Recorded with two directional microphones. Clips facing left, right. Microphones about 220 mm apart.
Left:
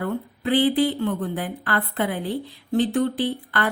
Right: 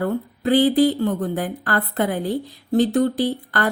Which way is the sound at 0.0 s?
40° right (ahead or behind).